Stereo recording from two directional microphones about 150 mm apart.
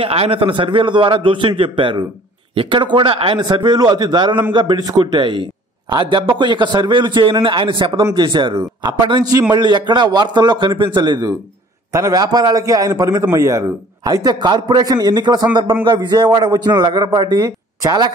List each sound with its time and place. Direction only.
0.0 s a man's voice: 40° right (ahead or behind)